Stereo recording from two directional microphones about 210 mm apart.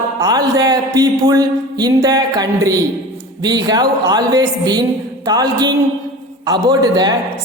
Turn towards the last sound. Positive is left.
turn(degrees=-20)  # may be behind; listen again after turning